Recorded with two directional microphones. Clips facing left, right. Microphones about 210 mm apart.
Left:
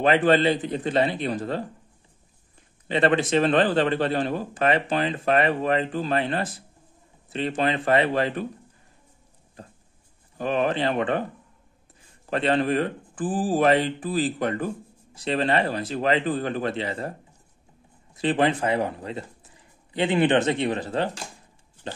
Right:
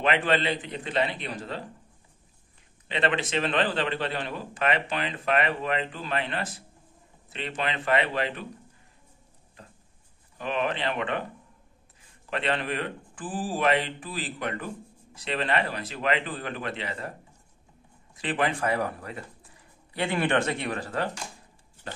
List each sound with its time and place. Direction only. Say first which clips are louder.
0.0 s speech: left 6 dB; 40° left (ahead or behind)
2.9 s speech: left 7 dB; 40° left (ahead or behind)
10.3 s speech: left 5 dB; 40° left (ahead or behind)
12.3 s speech: left 7 dB; 40° left (ahead or behind)
18.2 s speech: left 5 dB; 30° left (ahead or behind)
21.8 s a sound: left 4 dB; 20° left (ahead or behind)